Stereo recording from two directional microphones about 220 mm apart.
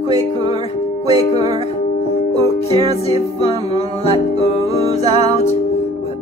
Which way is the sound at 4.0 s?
25° left (ahead or behind).